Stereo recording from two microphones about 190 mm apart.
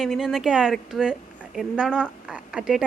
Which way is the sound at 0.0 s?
Centre (ahead or behind).